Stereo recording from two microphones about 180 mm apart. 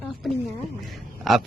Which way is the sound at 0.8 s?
Centre (ahead or behind).